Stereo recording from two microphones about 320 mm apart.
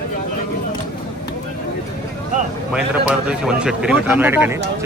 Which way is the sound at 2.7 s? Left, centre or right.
Centre.